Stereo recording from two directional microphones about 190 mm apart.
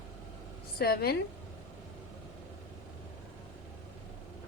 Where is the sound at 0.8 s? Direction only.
55° left (ahead or behind).